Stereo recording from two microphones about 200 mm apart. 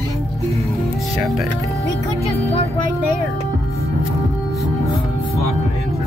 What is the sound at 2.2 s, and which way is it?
Music, 30° left (ahead or behind).